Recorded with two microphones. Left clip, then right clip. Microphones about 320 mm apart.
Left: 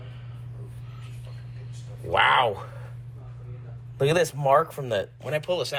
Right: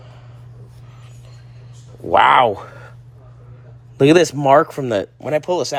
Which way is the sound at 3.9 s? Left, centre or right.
Right.